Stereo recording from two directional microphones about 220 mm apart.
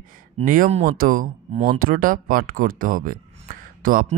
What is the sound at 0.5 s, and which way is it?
A woman's voice, 35° right (ahead or behind).